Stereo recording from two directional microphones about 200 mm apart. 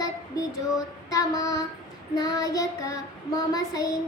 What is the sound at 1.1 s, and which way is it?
Child singing, 20° left (ahead or behind).